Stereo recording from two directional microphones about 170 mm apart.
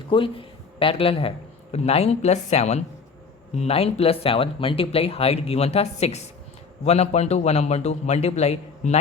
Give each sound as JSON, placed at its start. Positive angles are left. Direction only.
{"t": 0.1, "sound": "speech", "side_deg": 30}